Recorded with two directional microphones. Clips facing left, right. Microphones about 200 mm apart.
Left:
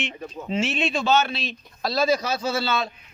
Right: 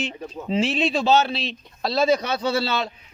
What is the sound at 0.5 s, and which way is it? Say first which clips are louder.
A man's voice: right 3 dB; 35° right (ahead or behind).